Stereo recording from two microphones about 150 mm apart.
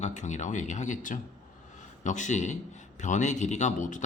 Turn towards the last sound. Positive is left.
turn(degrees=55)  # may be behind; listen again after turning